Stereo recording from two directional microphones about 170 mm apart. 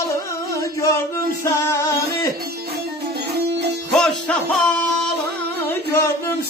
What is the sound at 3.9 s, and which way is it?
Music, 5° left (ahead or behind).